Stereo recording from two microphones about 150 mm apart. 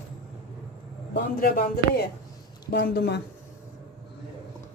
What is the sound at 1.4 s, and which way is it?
Speech, 90° left.